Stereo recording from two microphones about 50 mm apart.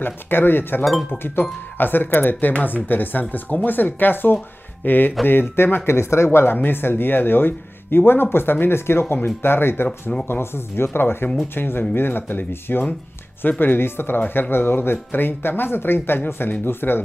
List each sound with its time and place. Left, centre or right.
0.0 s speech: left
5.9 s speech: left